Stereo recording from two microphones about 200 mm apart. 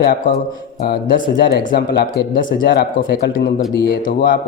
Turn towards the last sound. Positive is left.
turn(degrees=45)  # may be behind; listen again after turning